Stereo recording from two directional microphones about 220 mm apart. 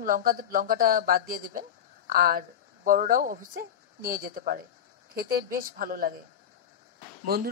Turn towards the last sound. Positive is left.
turn(degrees=-45)  # may be behind; listen again after turning